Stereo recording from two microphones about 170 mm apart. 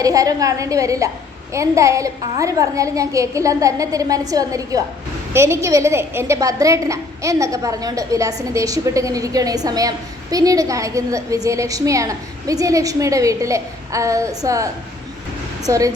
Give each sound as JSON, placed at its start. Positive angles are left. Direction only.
{"t": 0.0, "sound": "a woman's voice", "side_deg": -20}